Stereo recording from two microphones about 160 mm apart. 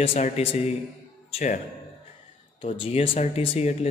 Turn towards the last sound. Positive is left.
turn(degrees=40)  # may be behind; listen again after turning